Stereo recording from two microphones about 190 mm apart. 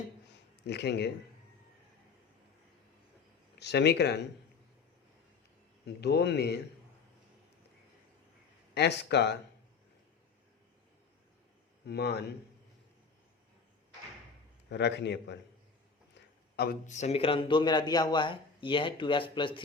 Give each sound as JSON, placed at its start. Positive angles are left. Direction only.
{"t": 0.6, "sound": "a man's voice", "side_deg": 60}
{"t": 3.6, "sound": "a man's voice", "side_deg": 60}
{"t": 5.8, "sound": "a man's voice", "side_deg": 60}
{"t": 8.7, "sound": "a man's voice", "side_deg": 60}
{"t": 11.9, "sound": "a man's voice", "side_deg": 60}
{"t": 14.7, "sound": "a man's voice", "side_deg": 65}
{"t": 16.6, "sound": "a man's voice", "side_deg": 45}